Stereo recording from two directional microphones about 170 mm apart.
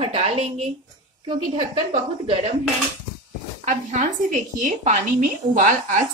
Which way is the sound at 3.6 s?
50° right (ahead or behind).